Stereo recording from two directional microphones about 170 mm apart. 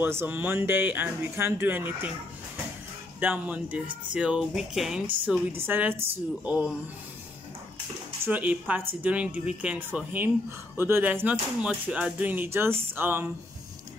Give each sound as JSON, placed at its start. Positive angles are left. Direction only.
{"t": 0.0, "sound": "speech", "side_deg": -15}
{"t": 3.2, "sound": "speech", "side_deg": -10}
{"t": 8.3, "sound": "speech", "side_deg": -10}